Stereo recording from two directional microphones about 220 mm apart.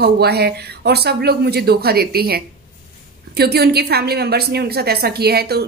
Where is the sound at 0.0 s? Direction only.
45° right (ahead or behind).